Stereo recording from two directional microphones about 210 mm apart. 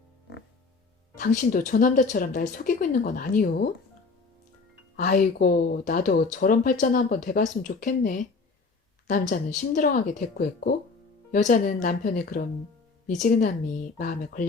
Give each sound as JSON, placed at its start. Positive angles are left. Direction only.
{"t": 1.1, "sound": "speech", "side_deg": 35}
{"t": 4.9, "sound": "speech", "side_deg": 40}